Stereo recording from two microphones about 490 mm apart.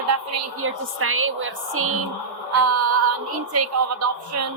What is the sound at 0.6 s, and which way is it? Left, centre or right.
A woman's voice, right.